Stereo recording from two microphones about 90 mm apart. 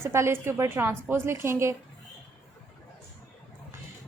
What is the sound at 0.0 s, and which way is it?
A woman's voice, 30° right (ahead or behind).